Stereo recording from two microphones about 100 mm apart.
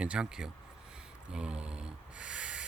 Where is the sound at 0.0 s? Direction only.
10° right (ahead or behind).